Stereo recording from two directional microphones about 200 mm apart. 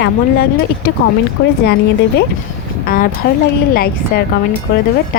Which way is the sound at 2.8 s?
45° left (ahead or behind).